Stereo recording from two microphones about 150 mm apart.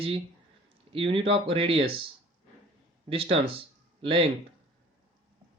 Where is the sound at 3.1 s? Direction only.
40° right (ahead or behind).